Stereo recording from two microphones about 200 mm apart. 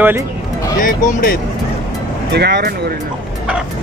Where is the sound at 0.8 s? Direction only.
45° left (ahead or behind).